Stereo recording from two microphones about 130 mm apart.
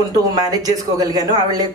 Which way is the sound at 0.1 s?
30° right (ahead or behind).